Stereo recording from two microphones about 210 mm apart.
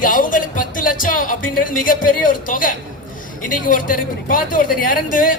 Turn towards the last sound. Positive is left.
turn(degrees=40)  # may be behind; listen again after turning